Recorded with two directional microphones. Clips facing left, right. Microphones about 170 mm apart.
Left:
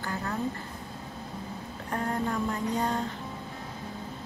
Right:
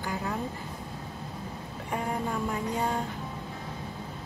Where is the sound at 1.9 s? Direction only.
10° right (ahead or behind).